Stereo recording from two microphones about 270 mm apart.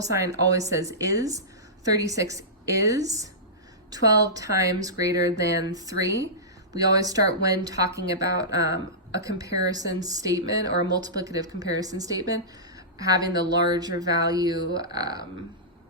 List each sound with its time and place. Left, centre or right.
0.0 s speech: centre